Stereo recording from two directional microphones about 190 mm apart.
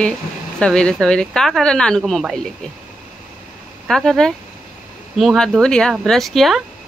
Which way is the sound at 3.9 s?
Centre (ahead or behind).